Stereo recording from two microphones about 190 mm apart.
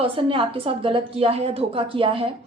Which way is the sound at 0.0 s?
30° right (ahead or behind).